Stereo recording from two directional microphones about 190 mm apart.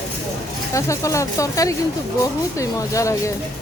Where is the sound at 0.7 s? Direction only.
15° left (ahead or behind).